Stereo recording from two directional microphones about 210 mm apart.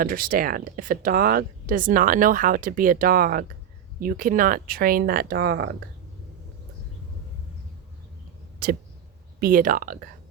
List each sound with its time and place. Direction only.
0.0 s speech: 45° right (ahead or behind)
8.6 s speech: 45° right (ahead or behind)